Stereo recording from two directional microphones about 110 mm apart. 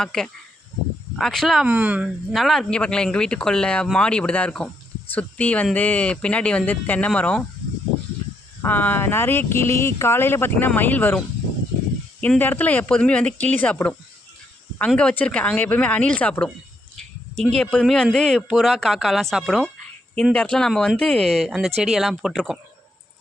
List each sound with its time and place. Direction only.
0.0 s speech: 5° left (ahead or behind)
1.6 s speech: 15° right (ahead or behind)
2.3 s speech: centre (ahead or behind)
8.6 s speech: 15° left (ahead or behind)
12.4 s speech: 20° left (ahead or behind); by 19.7 s centre (ahead or behind)
20.3 s speech: 10° left (ahead or behind)